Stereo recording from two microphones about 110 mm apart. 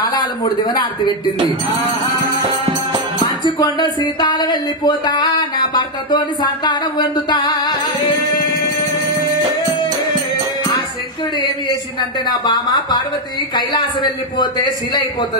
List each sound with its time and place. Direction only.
0.0 s a man's voice: 40° left (ahead or behind)
3.4 s music: 40° left (ahead or behind)
12.3 s music: 40° left (ahead or behind)